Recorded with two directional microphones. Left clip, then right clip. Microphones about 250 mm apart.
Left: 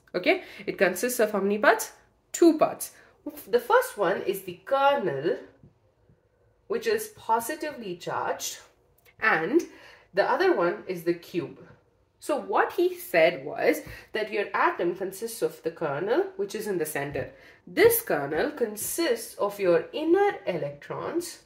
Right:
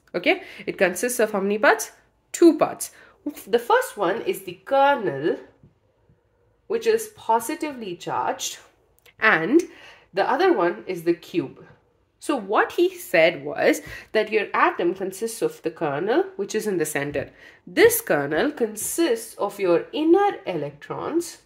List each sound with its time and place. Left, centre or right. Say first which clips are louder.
0.1 s a woman's voice: right 3 dB; right
3.4 s a woman's voice: right 2 dB; right
6.7 s a woman's voice: right 6 dB; right